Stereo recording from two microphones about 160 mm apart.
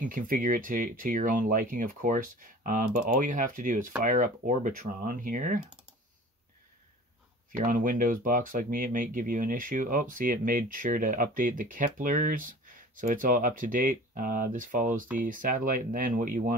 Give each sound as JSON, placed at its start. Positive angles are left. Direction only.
{"t": 0.0, "sound": "speech", "side_deg": -60}
{"t": 7.5, "sound": "speech", "side_deg": -55}